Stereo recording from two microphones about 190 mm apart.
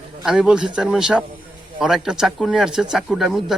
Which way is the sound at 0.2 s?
5° right (ahead or behind).